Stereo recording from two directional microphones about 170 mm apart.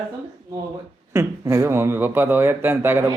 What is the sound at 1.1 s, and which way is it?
Speech, 15° right (ahead or behind).